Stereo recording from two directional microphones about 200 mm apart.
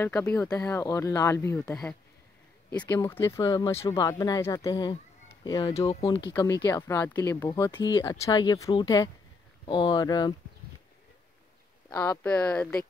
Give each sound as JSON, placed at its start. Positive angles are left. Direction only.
{"t": 0.0, "sound": "speech", "side_deg": 10}
{"t": 11.9, "sound": "speech", "side_deg": 15}